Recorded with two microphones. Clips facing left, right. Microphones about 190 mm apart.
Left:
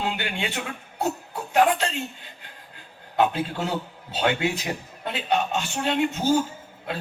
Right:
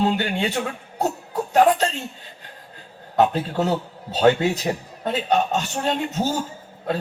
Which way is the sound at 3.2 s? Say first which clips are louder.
Right 4 dB; 40° right (ahead or behind).